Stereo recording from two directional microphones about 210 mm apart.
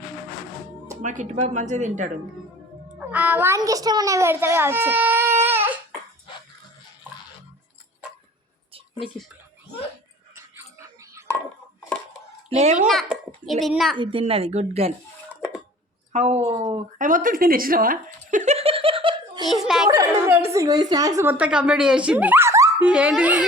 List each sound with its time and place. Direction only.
1.0 s speech: 35° right (ahead or behind)
3.1 s a child's voice: 5° right (ahead or behind)
10.3 s a sound: 15° right (ahead or behind)
12.5 s a child's voice: 30° right (ahead or behind)
12.9 s a child's voice: centre (ahead or behind)
13.9 s a woman's voice: 25° right (ahead or behind)
16.1 s speech: 35° right (ahead or behind)
16.6 s a sound: 35° right (ahead or behind)
19.6 s speech: centre (ahead or behind)
19.9 s a woman's voice: 15° right (ahead or behind)